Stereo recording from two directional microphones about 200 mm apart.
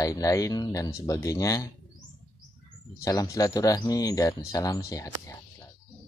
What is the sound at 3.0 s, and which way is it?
A man's voice, 15° left (ahead or behind).